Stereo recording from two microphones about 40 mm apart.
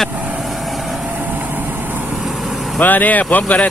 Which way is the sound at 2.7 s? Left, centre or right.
Left.